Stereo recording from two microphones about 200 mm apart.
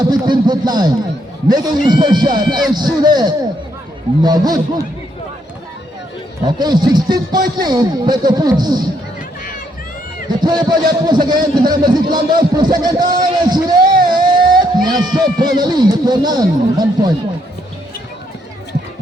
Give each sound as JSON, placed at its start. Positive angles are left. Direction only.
{"t": 0.0, "sound": "a man's voice", "side_deg": -20}
{"t": 6.4, "sound": "a man's voice", "side_deg": -20}
{"t": 10.2, "sound": "a man's voice", "side_deg": -20}